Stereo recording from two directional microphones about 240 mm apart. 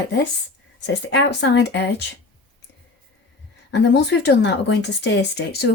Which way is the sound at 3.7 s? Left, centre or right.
Left.